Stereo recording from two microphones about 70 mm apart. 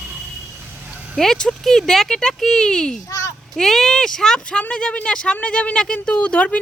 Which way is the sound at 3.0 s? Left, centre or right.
Left.